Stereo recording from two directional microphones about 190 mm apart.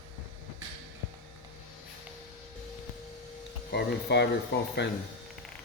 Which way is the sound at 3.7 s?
60° left (ahead or behind).